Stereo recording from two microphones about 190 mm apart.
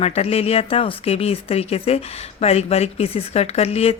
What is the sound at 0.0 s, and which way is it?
Speech, 30° left (ahead or behind).